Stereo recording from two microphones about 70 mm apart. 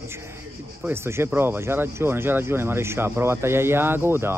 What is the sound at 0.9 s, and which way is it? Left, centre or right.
Speech, right.